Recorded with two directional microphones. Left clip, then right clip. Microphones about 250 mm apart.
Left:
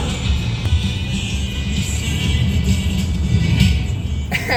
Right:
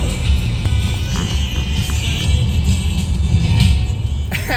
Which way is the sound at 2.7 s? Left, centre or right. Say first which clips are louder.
Left 1 dB; left.